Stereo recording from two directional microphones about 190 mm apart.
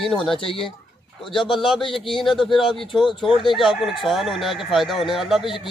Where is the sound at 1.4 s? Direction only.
Centre (ahead or behind).